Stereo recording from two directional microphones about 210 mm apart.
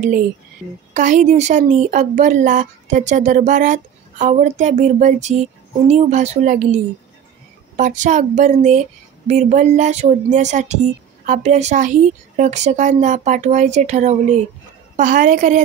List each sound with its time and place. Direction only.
0.9 s speech: 35° right (ahead or behind)